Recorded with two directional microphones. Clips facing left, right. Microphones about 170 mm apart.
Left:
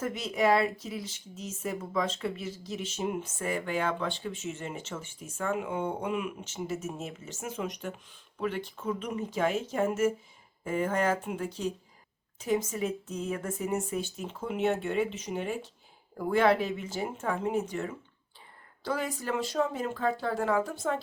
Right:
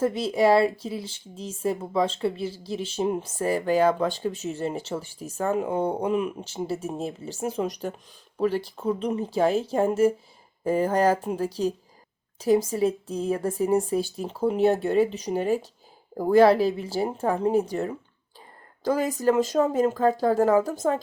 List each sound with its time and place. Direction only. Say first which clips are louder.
0.0 s speech: right 7 dB; 30° right (ahead or behind)